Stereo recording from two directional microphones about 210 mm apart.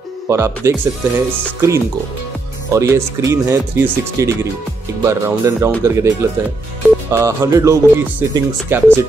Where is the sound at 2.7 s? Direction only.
15° right (ahead or behind).